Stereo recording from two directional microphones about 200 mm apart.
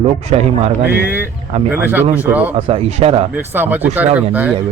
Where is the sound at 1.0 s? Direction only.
10° right (ahead or behind).